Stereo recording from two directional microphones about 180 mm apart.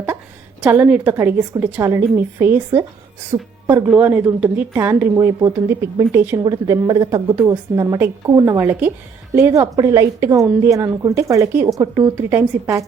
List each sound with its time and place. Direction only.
0.6 s a woman's voice: 10° right (ahead or behind)